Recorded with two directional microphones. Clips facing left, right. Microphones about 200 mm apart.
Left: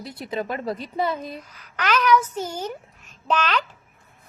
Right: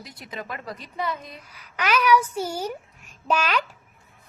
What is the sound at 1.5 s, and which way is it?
A woman's voice, 10° right (ahead or behind).